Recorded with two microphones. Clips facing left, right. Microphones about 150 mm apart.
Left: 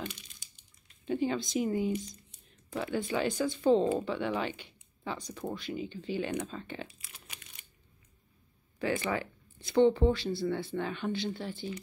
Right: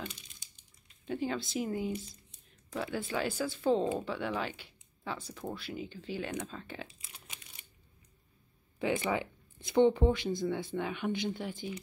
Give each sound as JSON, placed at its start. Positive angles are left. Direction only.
{"t": 1.0, "sound": "speech", "side_deg": 0}
{"t": 7.0, "sound": "crumpling", "side_deg": -20}
{"t": 8.8, "sound": "speech", "side_deg": -20}